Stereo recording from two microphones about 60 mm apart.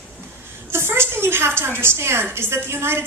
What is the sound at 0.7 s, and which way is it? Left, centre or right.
A woman's voice, right.